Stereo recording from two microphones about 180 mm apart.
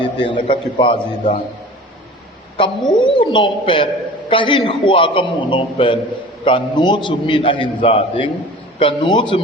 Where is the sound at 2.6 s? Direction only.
25° left (ahead or behind).